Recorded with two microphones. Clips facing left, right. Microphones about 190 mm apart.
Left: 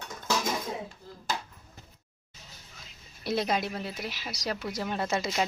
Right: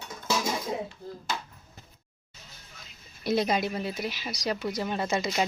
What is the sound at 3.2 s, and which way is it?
Speech, centre (ahead or behind).